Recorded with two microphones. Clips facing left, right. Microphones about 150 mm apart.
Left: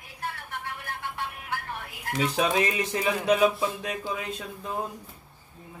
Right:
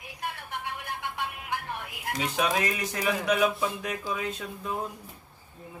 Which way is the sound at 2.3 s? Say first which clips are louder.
Left 1 dB; 30° left (ahead or behind).